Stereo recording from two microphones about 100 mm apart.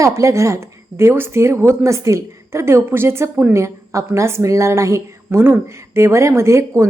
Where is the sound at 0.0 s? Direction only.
30° right (ahead or behind).